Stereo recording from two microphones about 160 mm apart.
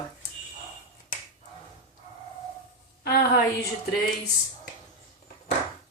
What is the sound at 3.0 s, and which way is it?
Speech, 75° left (ahead or behind).